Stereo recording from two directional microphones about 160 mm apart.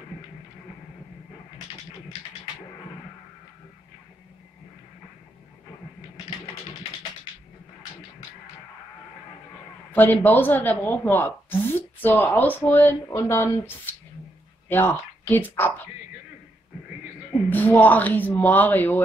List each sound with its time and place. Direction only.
9.9 s a woman's voice: 10° left (ahead or behind)
14.7 s a woman's voice: 10° left (ahead or behind)
17.5 s a woman's voice: 10° left (ahead or behind)